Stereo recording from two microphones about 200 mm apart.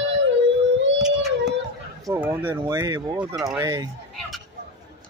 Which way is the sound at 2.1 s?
10° right (ahead or behind).